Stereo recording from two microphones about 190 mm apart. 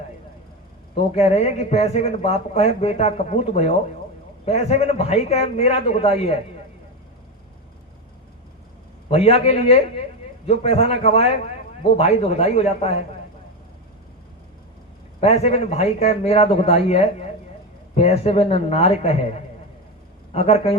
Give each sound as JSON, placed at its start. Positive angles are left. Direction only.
{"t": 1.1, "sound": "speech", "side_deg": 35}
{"t": 9.0, "sound": "speech", "side_deg": 35}
{"t": 15.2, "sound": "speech", "side_deg": 35}
{"t": 20.3, "sound": "speech", "side_deg": 35}